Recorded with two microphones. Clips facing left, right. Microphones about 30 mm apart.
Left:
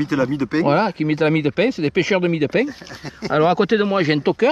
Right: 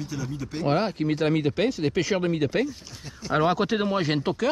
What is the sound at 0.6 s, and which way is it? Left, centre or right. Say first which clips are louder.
Speech: left 4 dB; left.